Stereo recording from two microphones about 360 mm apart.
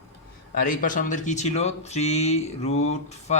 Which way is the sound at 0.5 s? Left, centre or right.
Left.